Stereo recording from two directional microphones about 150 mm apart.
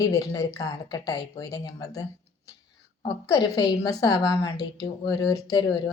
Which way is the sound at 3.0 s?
25° left (ahead or behind).